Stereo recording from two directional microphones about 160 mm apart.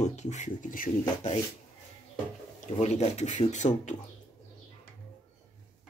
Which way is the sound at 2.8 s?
40° left (ahead or behind).